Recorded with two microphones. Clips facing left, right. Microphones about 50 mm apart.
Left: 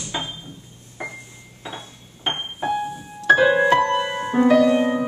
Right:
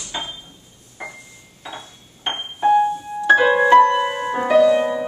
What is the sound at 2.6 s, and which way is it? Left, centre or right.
Music, centre.